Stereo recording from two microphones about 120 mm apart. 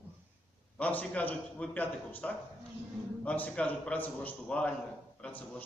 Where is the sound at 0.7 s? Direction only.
10° left (ahead or behind).